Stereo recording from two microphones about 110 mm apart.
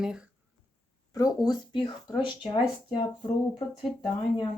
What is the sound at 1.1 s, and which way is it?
Speech, 35° left (ahead or behind).